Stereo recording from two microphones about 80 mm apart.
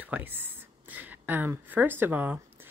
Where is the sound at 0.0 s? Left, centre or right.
Right.